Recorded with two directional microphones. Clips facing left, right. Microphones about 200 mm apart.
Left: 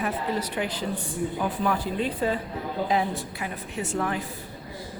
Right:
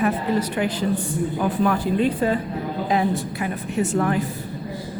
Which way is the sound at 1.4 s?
55° right (ahead or behind).